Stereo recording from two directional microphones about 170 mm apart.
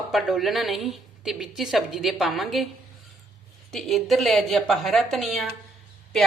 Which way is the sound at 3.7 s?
Centre (ahead or behind).